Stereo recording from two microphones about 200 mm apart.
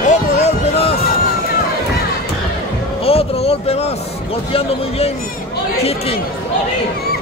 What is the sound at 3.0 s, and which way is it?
Speech, 30° left (ahead or behind).